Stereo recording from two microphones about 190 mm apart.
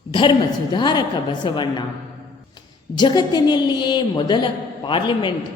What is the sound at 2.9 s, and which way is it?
A woman's voice, 25° left (ahead or behind).